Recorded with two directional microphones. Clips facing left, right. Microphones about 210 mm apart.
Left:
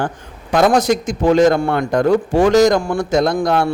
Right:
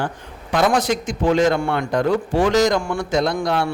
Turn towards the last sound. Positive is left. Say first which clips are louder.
# left 4 dB
turn(degrees=45)  # may be behind; listen again after turning